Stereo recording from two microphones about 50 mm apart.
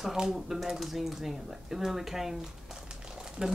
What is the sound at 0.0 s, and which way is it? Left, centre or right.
Speech, centre.